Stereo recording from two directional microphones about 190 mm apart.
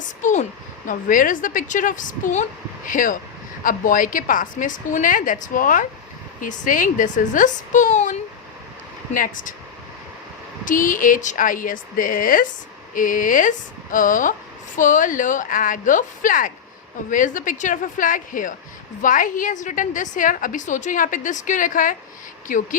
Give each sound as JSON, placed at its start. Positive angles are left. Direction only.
{"t": 0.2, "sound": "a sound", "side_deg": 40}
{"t": 0.9, "sound": "a woman's voice", "side_deg": 45}
{"t": 10.7, "sound": "a woman's voice", "side_deg": 45}